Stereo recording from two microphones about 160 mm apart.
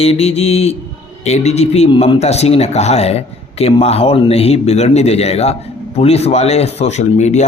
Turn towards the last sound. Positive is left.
turn(degrees=45)  # may be behind; listen again after turning